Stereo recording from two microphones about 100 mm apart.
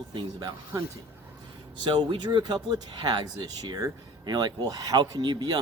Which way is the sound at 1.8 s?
50° right (ahead or behind).